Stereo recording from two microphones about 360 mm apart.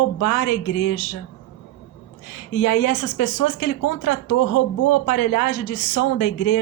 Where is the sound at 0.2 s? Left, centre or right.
Left.